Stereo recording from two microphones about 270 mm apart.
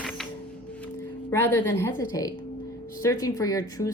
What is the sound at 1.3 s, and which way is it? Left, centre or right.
A woman's voice, centre.